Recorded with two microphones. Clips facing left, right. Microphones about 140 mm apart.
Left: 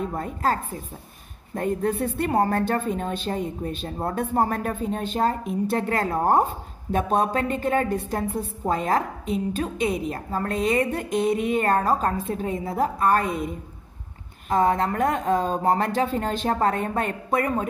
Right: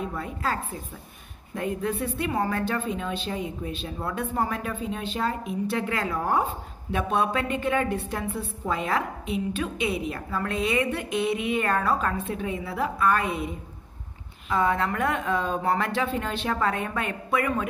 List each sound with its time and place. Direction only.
0.0 s a woman's voice: 45° left (ahead or behind)